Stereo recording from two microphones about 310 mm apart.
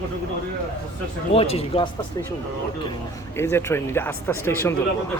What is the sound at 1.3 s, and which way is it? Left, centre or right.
Speech, centre.